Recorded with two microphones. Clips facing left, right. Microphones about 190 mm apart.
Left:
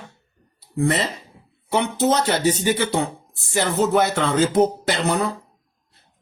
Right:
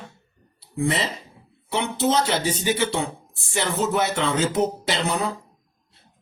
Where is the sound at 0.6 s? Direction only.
45° left (ahead or behind).